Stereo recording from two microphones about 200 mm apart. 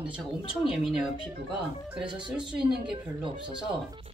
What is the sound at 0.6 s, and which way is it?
Speech, centre (ahead or behind).